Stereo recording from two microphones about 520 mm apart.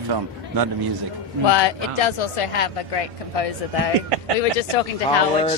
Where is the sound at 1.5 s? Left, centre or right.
Left.